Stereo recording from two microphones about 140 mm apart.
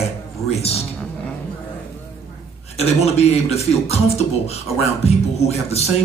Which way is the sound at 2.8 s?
50° left (ahead or behind).